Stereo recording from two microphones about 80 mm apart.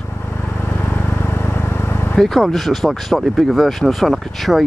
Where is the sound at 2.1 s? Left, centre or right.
Centre.